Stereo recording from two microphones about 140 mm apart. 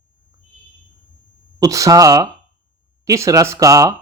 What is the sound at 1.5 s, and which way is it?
Speech, 25° right (ahead or behind).